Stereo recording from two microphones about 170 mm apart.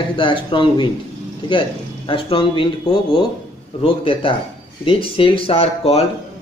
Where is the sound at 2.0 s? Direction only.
30° left (ahead or behind).